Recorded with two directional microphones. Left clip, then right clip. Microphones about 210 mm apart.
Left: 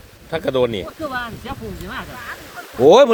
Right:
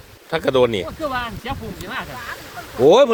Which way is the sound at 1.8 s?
20° right (ahead or behind).